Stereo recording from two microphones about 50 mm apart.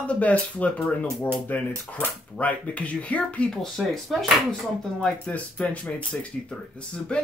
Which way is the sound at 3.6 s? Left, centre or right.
Centre.